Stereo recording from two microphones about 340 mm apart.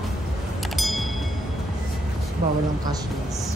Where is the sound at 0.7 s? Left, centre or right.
Centre.